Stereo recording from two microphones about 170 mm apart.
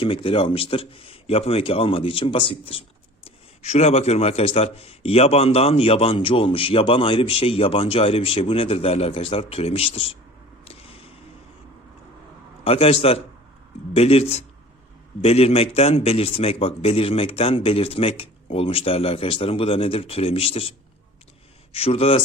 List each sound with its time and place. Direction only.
0.0 s speech: 30° left (ahead or behind)
10.7 s a sound: 35° left (ahead or behind)
12.6 s speech: 35° left (ahead or behind)